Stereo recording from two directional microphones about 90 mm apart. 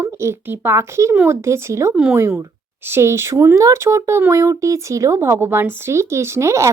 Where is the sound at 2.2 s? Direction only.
30° right (ahead or behind).